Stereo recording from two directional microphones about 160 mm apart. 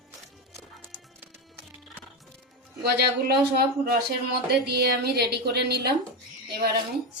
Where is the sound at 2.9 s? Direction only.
85° right.